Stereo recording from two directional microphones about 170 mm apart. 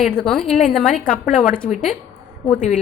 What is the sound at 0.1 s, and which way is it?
A woman's voice, 5° left (ahead or behind).